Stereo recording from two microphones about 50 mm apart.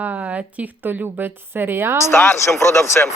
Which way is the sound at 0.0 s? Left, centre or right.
Right.